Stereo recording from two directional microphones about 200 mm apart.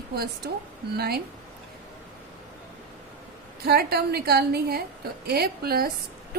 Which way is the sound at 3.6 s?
50° right (ahead or behind).